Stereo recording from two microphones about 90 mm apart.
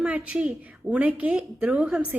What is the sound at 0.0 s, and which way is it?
A woman's voice, 15° right (ahead or behind).